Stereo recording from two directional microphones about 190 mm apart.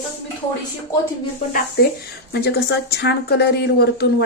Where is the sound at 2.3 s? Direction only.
55° left (ahead or behind).